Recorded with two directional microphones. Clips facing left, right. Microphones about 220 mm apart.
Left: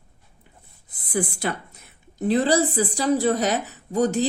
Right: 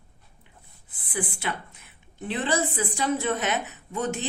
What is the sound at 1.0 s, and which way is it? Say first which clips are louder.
A woman's voice: left 6 dB; 40° left (ahead or behind).